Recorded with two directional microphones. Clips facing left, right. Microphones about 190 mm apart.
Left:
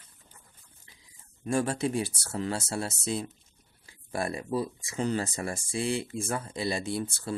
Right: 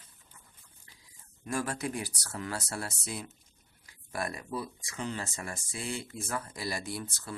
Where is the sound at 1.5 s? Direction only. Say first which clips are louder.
Left 6 dB; 30° left (ahead or behind).